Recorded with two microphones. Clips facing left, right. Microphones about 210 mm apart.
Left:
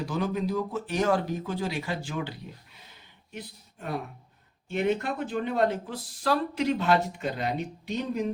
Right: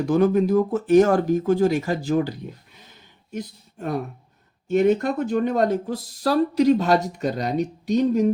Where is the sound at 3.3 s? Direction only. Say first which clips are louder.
Right 9 dB; 45° right (ahead or behind).